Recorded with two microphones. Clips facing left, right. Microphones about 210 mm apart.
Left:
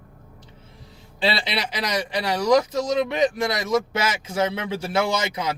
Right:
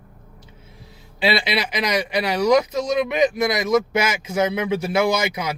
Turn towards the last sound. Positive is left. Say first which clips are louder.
# right 3 dB
turn(degrees=-10)  # may be behind; listen again after turning